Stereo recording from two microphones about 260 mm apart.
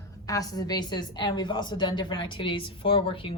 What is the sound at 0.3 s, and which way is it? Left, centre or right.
A woman's voice, centre.